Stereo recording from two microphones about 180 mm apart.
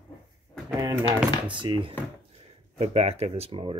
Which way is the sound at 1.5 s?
25° right (ahead or behind).